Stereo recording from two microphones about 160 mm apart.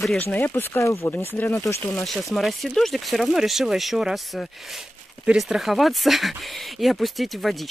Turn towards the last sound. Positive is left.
turn(degrees=0)  # may be behind; listen again after turning